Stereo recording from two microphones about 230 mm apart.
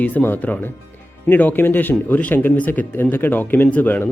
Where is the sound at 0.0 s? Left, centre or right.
Centre.